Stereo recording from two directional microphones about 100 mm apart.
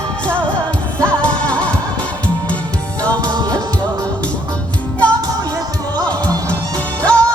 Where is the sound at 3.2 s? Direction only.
40° right (ahead or behind).